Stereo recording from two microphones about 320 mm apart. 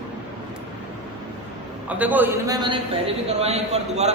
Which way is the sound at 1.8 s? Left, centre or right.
Centre.